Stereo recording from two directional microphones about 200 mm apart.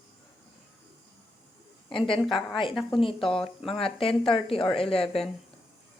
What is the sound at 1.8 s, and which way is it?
Speech, 25° left (ahead or behind).